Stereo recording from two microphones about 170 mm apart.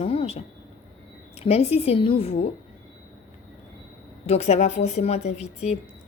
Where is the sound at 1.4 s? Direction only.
35° left (ahead or behind).